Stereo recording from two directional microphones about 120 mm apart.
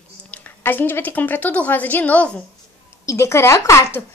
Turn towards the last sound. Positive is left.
turn(degrees=20)  # may be behind; listen again after turning